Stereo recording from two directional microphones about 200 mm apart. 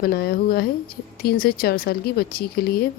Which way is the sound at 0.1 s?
50° left (ahead or behind).